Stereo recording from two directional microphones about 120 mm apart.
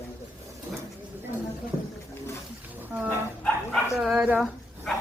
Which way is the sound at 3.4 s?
5° left (ahead or behind).